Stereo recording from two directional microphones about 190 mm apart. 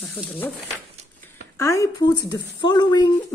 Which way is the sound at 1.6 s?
15° left (ahead or behind).